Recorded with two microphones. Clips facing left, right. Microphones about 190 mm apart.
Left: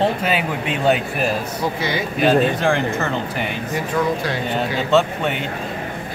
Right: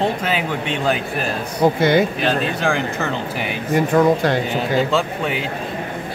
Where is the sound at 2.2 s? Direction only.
Centre (ahead or behind).